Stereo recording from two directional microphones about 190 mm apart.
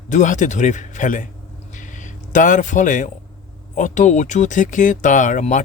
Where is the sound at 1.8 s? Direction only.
40° left (ahead or behind).